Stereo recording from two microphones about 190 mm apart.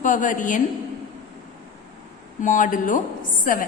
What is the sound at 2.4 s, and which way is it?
A woman's voice, 45° left (ahead or behind).